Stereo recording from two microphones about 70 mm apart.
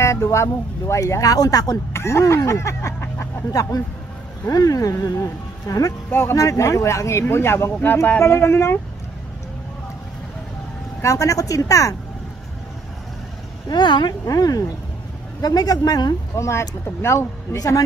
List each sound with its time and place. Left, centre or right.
0.0 s speech: left
2.0 s speech: left
4.5 s speech: left
6.0 s speech: left
6.3 s speech: left
7.8 s speech: left
8.2 s speech: left
11.0 s speech: left
13.7 s speech: left
14.2 s speech: left
16.3 s speech: left
17.6 s speech: left